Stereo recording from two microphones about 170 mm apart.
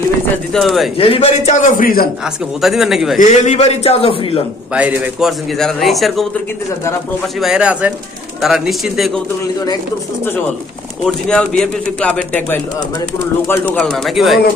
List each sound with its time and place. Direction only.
0.5 s a man's voice: centre (ahead or behind)
0.9 s a man's voice: 35° left (ahead or behind); by 2.0 s 60° left (ahead or behind)
2.2 s a man's voice: centre (ahead or behind)
3.2 s a man's voice: 45° left (ahead or behind)
4.7 s a man's voice: 10° right (ahead or behind)
7.3 s a man's voice: 5° right (ahead or behind)
11.0 s a man's voice: 5° left (ahead or behind)
13.7 s a man's voice: centre (ahead or behind)